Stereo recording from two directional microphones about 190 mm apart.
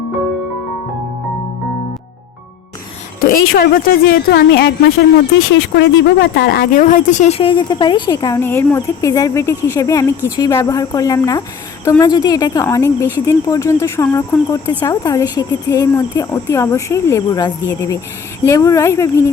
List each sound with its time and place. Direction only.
3.2 s a woman's voice: 50° left (ahead or behind)
5.5 s speech: 65° left (ahead or behind); by 19.2 s 15° left (ahead or behind)